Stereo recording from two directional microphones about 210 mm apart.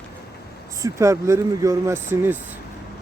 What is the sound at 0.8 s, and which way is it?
Speech, 15° right (ahead or behind).